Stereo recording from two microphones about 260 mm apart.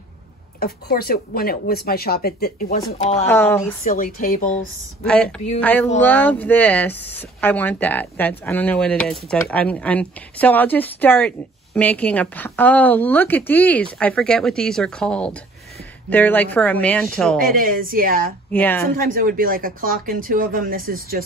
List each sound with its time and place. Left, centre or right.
0.6 s speech: left
3.0 s speech: left
3.3 s speech: centre
3.8 s speech: left
5.0 s speech: centre
17.4 s speech: right
18.5 s speech: centre
18.9 s speech: right